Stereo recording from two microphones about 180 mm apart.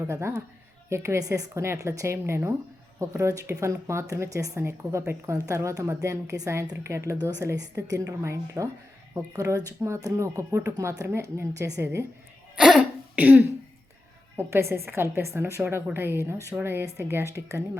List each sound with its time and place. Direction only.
0.0 s a woman's voice: 15° right (ahead or behind)
12.5 s throat clearing: 5° right (ahead or behind)
14.3 s a woman's voice: 15° right (ahead or behind)